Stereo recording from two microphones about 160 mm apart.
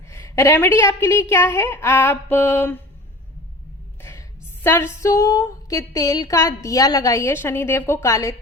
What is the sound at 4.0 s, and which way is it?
A woman's voice, 15° left (ahead or behind).